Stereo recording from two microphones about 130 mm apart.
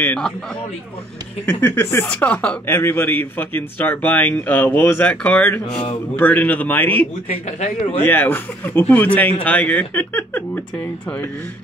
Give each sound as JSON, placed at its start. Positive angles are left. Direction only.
{"t": 0.0, "sound": "a man's voice", "side_deg": 10}
{"t": 1.4, "sound": "a man's voice", "side_deg": 10}
{"t": 7.2, "sound": "a man's voice", "side_deg": 65}
{"t": 8.0, "sound": "a man's voice", "side_deg": 15}